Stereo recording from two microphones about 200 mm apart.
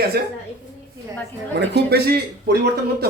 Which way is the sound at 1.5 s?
55° right (ahead or behind).